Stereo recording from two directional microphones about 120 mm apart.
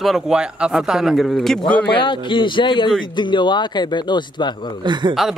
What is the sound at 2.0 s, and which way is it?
A man's voice, 40° left (ahead or behind).